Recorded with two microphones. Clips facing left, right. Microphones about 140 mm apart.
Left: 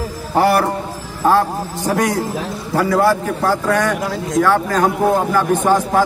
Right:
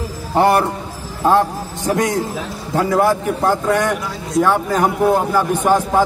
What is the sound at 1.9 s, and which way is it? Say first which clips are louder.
A man's voice: even; 20° right (ahead or behind).